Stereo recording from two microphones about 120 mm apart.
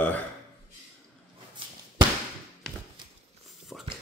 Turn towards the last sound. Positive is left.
turn(degrees=-5)  # may be behind; listen again after turning